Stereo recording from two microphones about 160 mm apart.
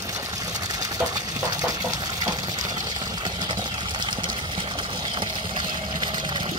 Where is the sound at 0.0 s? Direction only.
20° right (ahead or behind).